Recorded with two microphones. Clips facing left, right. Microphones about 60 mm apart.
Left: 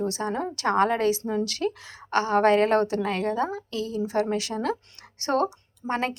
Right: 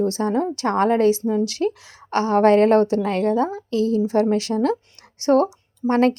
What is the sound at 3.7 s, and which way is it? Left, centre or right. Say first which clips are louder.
Speech: right 10 dB; right.